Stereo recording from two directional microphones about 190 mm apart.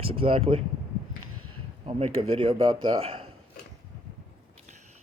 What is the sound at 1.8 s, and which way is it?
Speech, 30° right (ahead or behind).